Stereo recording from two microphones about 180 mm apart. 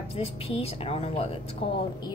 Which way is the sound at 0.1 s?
35° left (ahead or behind).